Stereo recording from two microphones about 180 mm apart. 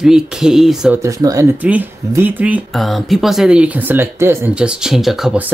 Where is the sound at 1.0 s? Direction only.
20° right (ahead or behind).